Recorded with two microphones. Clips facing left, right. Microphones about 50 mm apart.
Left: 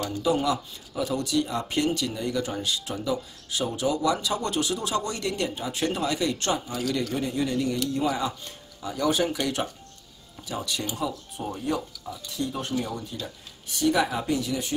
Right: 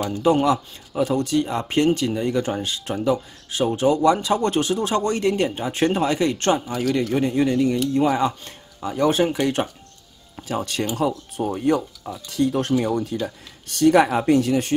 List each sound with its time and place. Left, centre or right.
0.2 s a man's voice: right
10.5 s speech: right
11.0 s speech: right